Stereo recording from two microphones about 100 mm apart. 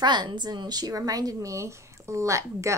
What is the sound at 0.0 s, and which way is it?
A woman's voice, 45° right (ahead or behind).